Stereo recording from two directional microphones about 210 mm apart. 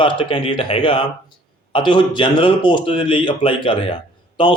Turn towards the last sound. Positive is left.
turn(degrees=20)  # may be behind; listen again after turning